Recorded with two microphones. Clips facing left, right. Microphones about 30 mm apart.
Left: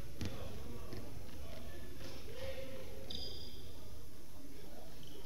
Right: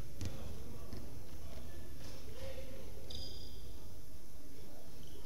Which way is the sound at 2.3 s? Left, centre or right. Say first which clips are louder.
Left 4 dB; centre.